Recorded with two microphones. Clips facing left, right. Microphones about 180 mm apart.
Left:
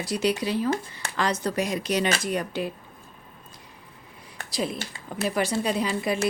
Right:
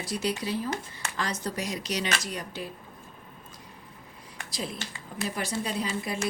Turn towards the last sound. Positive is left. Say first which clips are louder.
# left 5 dB
turn(degrees=70)  # may be behind; listen again after turning